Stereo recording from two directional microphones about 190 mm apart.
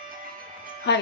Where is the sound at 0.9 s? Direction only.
65° left (ahead or behind).